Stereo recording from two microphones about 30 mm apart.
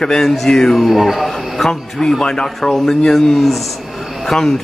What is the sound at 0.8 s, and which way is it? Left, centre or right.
Speech, centre.